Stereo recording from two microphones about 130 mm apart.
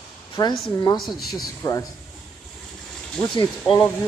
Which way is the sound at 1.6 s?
25° left (ahead or behind).